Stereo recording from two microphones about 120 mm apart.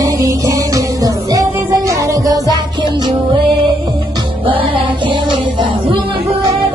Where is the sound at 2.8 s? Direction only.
40° right (ahead or behind).